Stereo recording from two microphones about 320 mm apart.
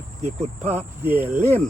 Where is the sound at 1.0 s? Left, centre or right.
Centre.